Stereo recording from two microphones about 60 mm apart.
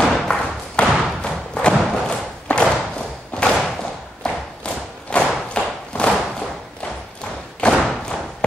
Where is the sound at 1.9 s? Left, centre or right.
Centre.